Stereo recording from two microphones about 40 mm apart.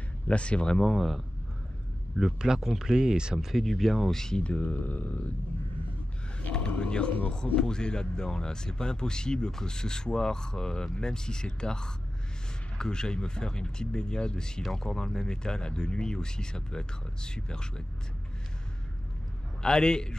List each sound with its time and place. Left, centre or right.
0.3 s speech: left
0.7 s speech: centre
2.3 s speech: centre
3.3 s speech: centre
4.4 s speech: left
6.8 s a sound: left
7.5 s speech: left
19.6 s speech: centre